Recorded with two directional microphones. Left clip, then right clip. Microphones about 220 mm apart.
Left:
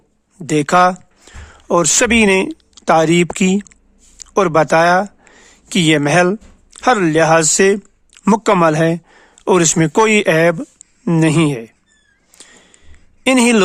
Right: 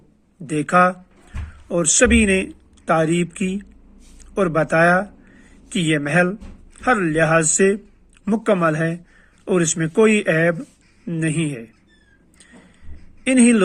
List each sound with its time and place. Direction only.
0.4 s speech: 40° left (ahead or behind)
13.2 s a woman's voice: 40° left (ahead or behind)